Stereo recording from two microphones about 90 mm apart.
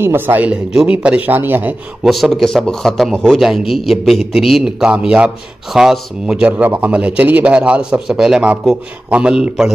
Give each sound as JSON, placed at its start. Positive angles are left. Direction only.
{"t": 0.0, "sound": "speech", "side_deg": -25}
{"t": 2.0, "sound": "a man's voice", "side_deg": 0}